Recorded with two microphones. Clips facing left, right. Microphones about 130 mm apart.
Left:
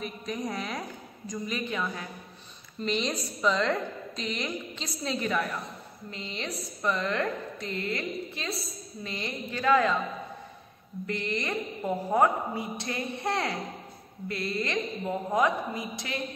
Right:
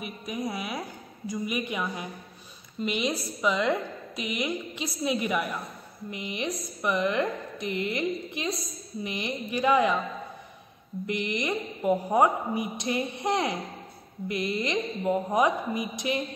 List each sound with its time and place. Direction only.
0.0 s a woman's voice: 10° right (ahead or behind)
11.1 s a woman's voice: 15° right (ahead or behind)